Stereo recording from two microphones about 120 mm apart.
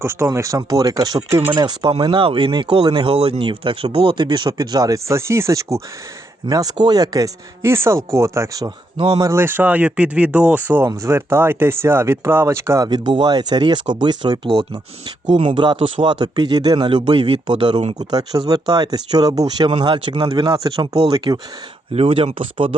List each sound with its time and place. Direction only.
0.0 s speech: 20° right (ahead or behind)
2.2 s speech: 45° right (ahead or behind); by 8.7 s 25° right (ahead or behind)
9.0 s speech: 45° right (ahead or behind)
9.2 s speech: 20° right (ahead or behind)
12.9 s speech: 40° right (ahead or behind)
20.7 s speech: 45° right (ahead or behind)